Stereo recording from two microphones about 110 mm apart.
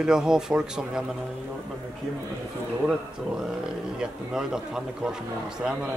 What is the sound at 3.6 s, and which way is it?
A man's voice, 5° right (ahead or behind).